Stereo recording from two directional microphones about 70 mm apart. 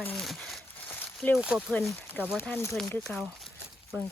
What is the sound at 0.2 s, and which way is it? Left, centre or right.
Crumpling, centre.